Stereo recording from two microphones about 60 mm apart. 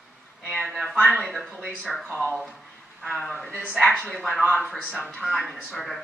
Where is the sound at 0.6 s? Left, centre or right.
Centre.